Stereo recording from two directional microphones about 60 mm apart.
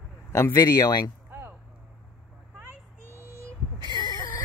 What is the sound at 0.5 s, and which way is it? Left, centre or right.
Speech, left.